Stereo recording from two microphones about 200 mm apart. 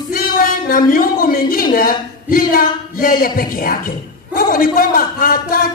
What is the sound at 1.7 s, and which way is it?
A man's voice, 45° left (ahead or behind).